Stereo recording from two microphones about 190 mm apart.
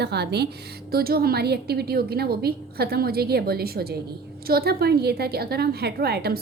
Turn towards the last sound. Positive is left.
turn(degrees=-55)  # may be behind; listen again after turning